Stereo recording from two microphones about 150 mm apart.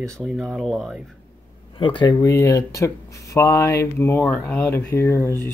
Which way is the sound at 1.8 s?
30° left (ahead or behind).